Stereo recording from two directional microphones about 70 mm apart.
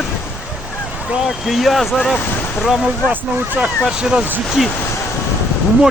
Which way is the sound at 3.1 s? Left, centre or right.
Right.